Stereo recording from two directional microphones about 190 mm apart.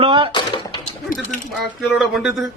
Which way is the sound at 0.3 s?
25° left (ahead or behind).